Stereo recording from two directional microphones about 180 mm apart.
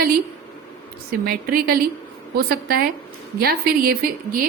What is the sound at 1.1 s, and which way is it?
A woman's voice, 55° right (ahead or behind).